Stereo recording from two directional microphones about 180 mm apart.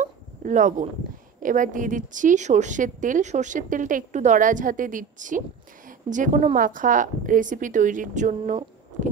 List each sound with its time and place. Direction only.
0.0 s dog: 45° right (ahead or behind)
1.4 s a woman's voice: 45° right (ahead or behind)